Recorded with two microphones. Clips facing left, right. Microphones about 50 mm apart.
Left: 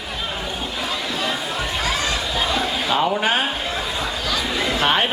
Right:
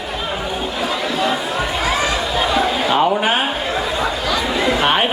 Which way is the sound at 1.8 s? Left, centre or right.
Centre.